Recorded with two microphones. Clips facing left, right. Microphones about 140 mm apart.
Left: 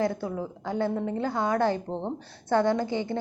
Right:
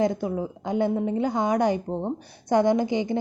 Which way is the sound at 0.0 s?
20° right (ahead or behind).